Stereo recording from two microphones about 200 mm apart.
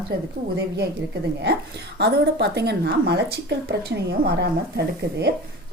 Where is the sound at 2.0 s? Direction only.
55° right (ahead or behind).